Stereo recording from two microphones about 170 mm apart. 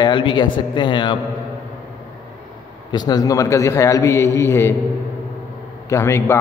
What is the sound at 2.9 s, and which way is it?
A man's voice, 25° left (ahead or behind).